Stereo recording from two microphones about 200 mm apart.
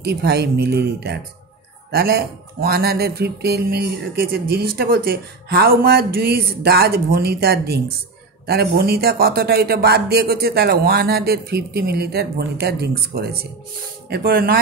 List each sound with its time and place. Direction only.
0.0 s speech: 55° right (ahead or behind)